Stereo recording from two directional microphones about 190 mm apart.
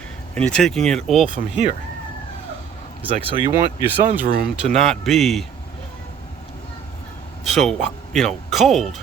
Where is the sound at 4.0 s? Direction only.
50° right (ahead or behind).